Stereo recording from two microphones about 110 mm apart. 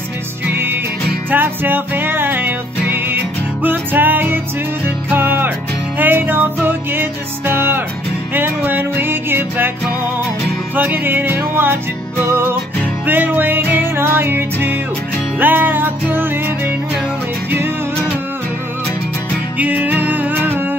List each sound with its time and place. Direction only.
0.5 s music: 20° right (ahead or behind)
10.8 s music: 15° right (ahead or behind)
19.6 s music: 15° right (ahead or behind)